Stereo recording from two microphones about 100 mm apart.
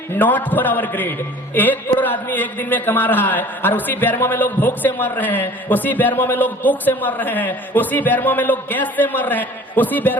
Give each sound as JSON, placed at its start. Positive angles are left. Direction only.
{"t": 0.1, "sound": "a man's voice", "side_deg": 20}